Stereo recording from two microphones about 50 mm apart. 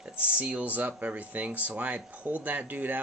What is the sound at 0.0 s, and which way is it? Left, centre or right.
Speech, right.